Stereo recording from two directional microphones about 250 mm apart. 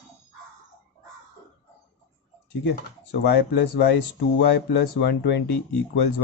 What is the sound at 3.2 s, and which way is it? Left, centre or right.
Speech, left.